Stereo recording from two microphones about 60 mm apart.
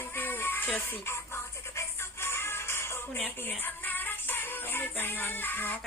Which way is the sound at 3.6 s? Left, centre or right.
Left.